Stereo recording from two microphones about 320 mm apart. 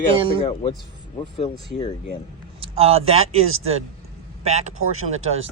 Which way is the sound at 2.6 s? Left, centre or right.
Centre.